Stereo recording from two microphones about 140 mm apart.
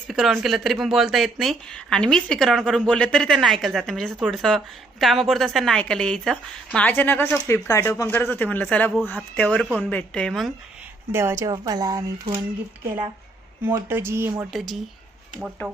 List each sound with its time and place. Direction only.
0.1 s speech: centre (ahead or behind)
11.1 s speech: 20° right (ahead or behind)
13.7 s speech: 15° right (ahead or behind)
14.5 s speech: centre (ahead or behind)